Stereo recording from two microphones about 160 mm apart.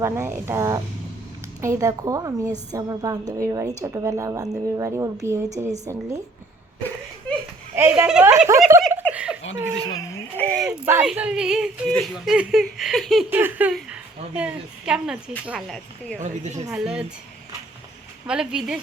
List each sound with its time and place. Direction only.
0.0 s a woman's voice: 15° right (ahead or behind)
7.8 s speech: 10° right (ahead or behind)
8.4 s a woman's voice: 20° right (ahead or behind)
8.9 s giggle: 10° right (ahead or behind)
9.9 s speech: 20° left (ahead or behind)
10.3 s speech: 5° left (ahead or behind)
10.7 s speech: 15° right (ahead or behind)
13.3 s speech: 10° right (ahead or behind)
16.1 s a woman's voice: 50° right (ahead or behind)
16.7 s speech: 5° right (ahead or behind)
18.3 s speech: 5° right (ahead or behind)